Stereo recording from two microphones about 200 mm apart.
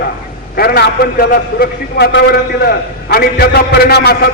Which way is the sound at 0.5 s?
50° left (ahead or behind).